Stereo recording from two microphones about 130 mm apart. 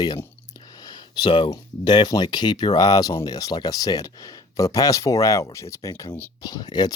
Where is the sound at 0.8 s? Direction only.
35° left (ahead or behind).